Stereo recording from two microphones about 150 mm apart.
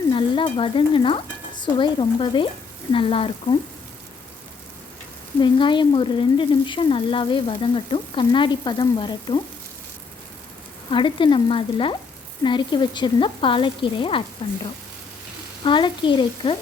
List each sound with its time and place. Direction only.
0.1 s stir: 35° left (ahead or behind)
1.6 s speech: 30° left (ahead or behind)
5.4 s speech: 30° left (ahead or behind)
10.9 s speech: 30° left (ahead or behind)
15.6 s speech: 35° left (ahead or behind)